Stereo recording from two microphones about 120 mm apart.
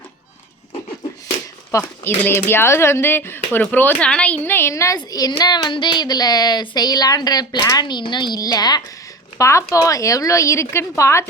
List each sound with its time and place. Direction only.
1.7 s a woman's voice: 20° left (ahead or behind)